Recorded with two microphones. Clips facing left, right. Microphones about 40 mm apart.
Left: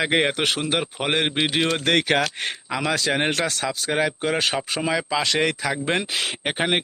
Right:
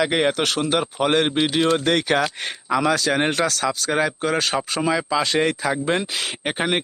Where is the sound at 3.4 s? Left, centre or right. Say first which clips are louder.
Right 3 dB; left.